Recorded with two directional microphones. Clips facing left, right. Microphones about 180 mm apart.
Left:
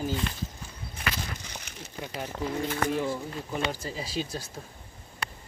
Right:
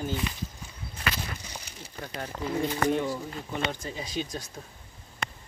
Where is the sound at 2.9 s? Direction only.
Centre (ahead or behind).